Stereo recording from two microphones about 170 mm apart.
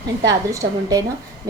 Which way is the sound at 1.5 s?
20° right (ahead or behind).